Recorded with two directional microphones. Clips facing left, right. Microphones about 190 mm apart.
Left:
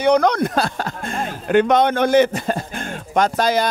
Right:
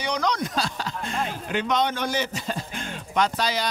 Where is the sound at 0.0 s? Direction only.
55° left (ahead or behind).